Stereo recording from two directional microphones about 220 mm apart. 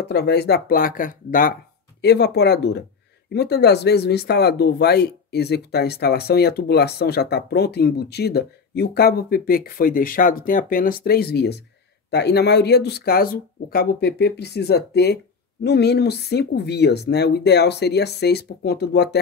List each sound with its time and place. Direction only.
0.0 s speech: 45° left (ahead or behind)